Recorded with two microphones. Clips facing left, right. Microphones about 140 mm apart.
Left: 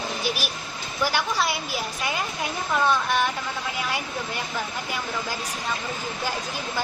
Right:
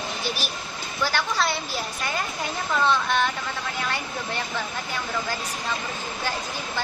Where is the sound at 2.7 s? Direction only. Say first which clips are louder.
Even; 10° left (ahead or behind).